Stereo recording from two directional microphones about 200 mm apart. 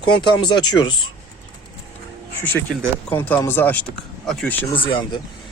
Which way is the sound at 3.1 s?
10° left (ahead or behind).